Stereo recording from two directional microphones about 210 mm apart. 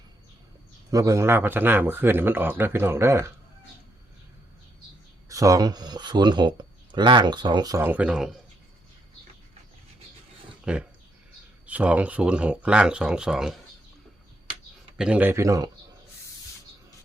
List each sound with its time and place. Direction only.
0.9 s a man's voice: 15° right (ahead or behind)
5.3 s speech: 15° right (ahead or behind)
10.7 s speech: 5° right (ahead or behind)
14.9 s a man's voice: 5° right (ahead or behind)